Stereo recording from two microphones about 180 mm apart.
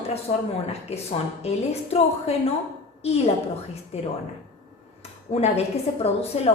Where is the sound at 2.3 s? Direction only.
35° left (ahead or behind).